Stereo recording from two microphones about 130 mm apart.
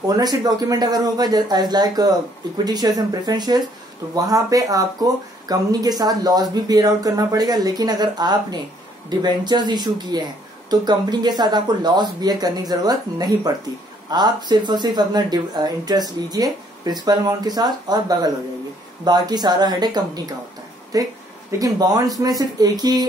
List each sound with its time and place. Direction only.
0.1 s speech: 30° right (ahead or behind)